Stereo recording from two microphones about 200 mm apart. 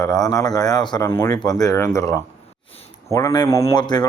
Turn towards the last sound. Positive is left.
turn(degrees=20)  # may be behind; listen again after turning